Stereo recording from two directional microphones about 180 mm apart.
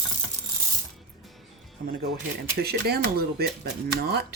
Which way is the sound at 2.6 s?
60° right (ahead or behind).